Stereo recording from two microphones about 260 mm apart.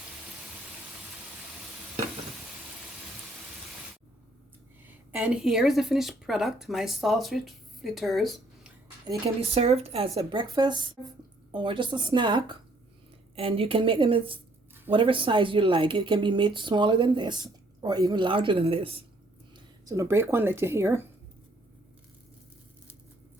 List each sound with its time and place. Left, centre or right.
4.9 s speech: centre
9.0 s a woman's voice: right